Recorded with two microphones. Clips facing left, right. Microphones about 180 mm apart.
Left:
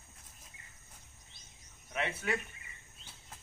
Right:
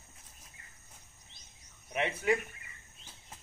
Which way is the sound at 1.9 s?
15° right (ahead or behind).